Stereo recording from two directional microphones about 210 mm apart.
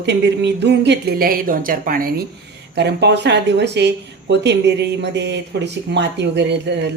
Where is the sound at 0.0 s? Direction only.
55° right (ahead or behind).